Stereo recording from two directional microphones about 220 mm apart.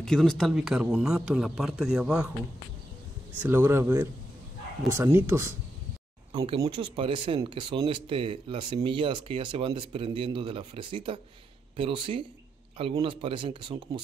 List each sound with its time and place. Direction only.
0.0 s a man's voice: 5° left (ahead or behind)
3.4 s speech: 10° right (ahead or behind)
6.3 s speech: 25° right (ahead or behind)